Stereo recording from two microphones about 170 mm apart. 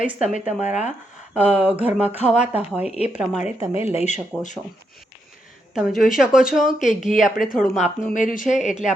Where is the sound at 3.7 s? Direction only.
35° left (ahead or behind).